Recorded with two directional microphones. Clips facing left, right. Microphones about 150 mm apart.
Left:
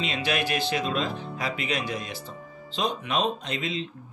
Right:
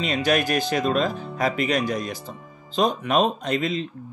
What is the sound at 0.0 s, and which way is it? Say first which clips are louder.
Speech: right 6 dB; 45° right (ahead or behind).